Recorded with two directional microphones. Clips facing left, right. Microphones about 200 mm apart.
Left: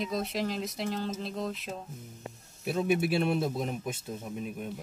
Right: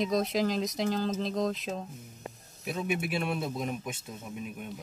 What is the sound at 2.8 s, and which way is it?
Speech, 35° left (ahead or behind).